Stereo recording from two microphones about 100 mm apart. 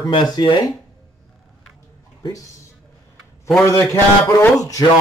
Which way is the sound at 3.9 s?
20° left (ahead or behind).